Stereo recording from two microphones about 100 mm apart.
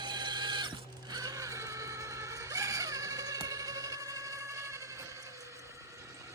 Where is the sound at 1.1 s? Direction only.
40° right (ahead or behind).